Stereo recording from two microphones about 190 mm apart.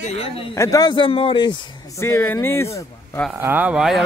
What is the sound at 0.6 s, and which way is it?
Speech, 20° left (ahead or behind).